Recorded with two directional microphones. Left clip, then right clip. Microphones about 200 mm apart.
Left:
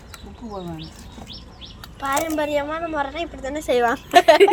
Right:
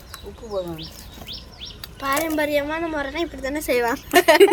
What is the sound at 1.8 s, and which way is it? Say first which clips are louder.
A woman's voice: even; 15° right (ahead or behind).